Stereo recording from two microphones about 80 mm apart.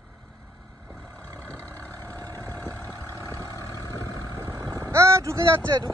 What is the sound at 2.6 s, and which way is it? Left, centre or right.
Vehicle, right.